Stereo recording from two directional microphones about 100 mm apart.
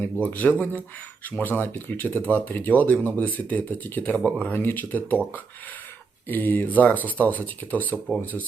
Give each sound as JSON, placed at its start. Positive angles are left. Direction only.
{"t": 0.0, "sound": "speech", "side_deg": 20}
{"t": 6.2, "sound": "speech", "side_deg": 20}